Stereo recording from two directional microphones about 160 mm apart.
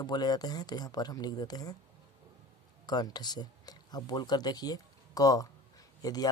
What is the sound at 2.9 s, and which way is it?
Speech, 25° left (ahead or behind).